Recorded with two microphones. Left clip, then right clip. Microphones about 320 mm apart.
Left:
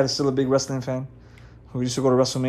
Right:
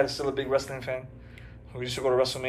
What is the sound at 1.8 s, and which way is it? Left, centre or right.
Speech, left.